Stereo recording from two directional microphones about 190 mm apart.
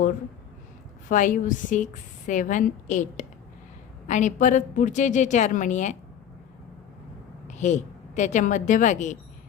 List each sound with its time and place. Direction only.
1.0 s a woman's voice: 40° left (ahead or behind)
7.4 s a woman's voice: 40° left (ahead or behind)